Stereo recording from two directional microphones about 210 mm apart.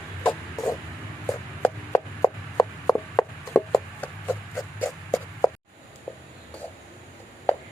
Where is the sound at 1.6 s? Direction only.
15° left (ahead or behind).